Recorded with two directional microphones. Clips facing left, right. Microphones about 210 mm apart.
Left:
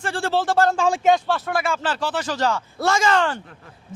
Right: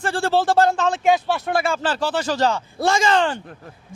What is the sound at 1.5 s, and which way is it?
Speech, 30° right (ahead or behind).